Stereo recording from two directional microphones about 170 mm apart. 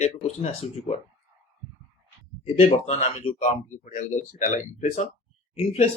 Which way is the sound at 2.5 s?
40° left (ahead or behind).